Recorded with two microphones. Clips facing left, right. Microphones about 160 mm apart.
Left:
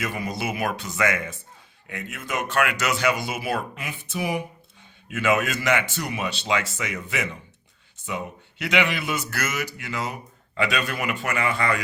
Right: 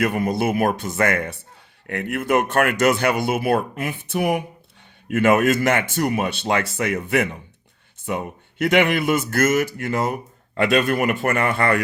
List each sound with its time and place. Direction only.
0.0 s a man's voice: 55° right (ahead or behind)